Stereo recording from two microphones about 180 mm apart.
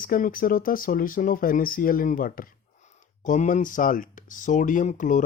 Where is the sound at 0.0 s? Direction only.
50° left (ahead or behind).